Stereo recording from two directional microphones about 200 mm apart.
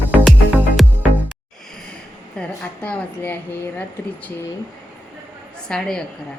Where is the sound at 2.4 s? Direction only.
5° left (ahead or behind).